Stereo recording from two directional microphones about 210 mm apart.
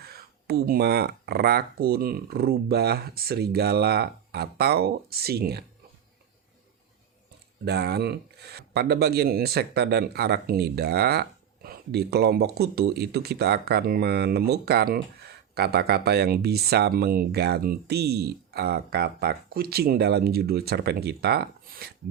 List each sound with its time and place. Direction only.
0.1 s speech: 50° right (ahead or behind)
7.6 s speech: 50° right (ahead or behind)